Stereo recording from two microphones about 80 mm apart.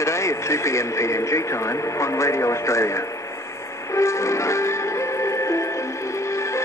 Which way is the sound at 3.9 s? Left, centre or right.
Left.